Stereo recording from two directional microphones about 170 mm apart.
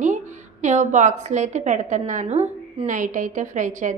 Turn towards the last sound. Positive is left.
turn(degrees=-45)  # may be behind; listen again after turning